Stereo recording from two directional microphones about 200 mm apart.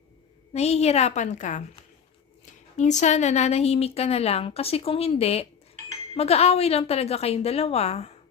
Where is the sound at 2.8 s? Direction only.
35° left (ahead or behind).